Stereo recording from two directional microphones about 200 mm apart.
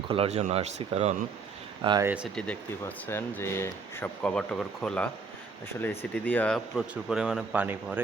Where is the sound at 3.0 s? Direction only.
10° left (ahead or behind).